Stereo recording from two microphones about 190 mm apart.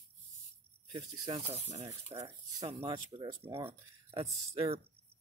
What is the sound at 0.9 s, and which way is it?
Speech, 30° right (ahead or behind).